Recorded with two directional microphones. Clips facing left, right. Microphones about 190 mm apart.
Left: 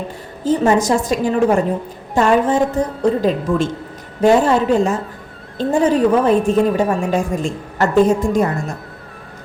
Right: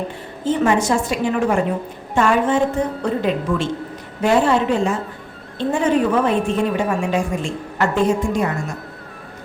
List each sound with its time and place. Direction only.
0.4 s a woman's voice: 40° left (ahead or behind)